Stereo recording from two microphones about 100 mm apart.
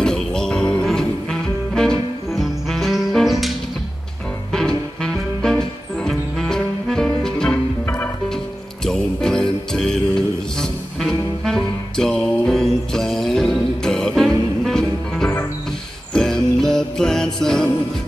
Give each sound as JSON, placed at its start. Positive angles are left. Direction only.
{"t": 0.0, "sound": "music", "side_deg": 5}
{"t": 7.8, "sound": "music", "side_deg": 20}
{"t": 8.8, "sound": "music", "side_deg": 5}